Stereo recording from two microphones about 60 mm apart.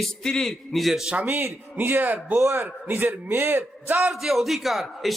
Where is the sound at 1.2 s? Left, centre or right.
Right.